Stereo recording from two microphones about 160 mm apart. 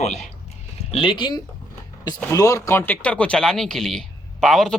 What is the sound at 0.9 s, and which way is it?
Speech, 35° left (ahead or behind).